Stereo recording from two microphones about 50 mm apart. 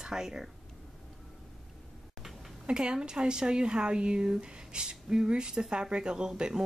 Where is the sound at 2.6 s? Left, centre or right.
Centre.